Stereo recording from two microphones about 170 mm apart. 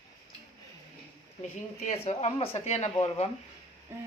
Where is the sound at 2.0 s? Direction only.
35° left (ahead or behind).